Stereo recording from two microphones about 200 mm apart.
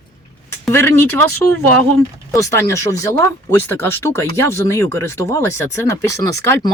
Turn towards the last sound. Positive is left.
turn(degrees=15)  # may be behind; listen again after turning